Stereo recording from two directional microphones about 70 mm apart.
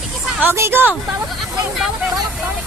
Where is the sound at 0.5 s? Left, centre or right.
Right.